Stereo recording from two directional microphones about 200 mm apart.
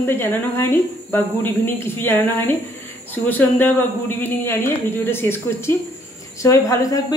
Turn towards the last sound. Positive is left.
turn(degrees=15)  # may be behind; listen again after turning